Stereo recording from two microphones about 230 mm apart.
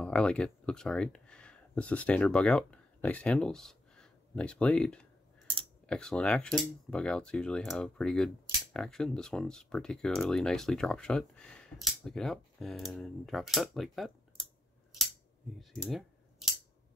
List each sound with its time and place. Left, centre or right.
0.0 s speech: centre
15.7 s clicking: centre